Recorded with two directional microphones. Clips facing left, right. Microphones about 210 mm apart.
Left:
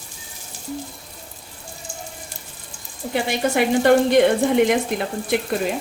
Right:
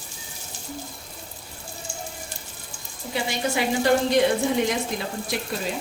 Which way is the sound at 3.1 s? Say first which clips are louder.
Left 5 dB; 60° left (ahead or behind).